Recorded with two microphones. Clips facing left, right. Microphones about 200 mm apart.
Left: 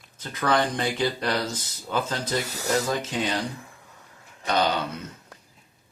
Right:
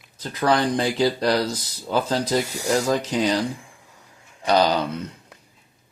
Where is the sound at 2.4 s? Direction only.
10° right (ahead or behind).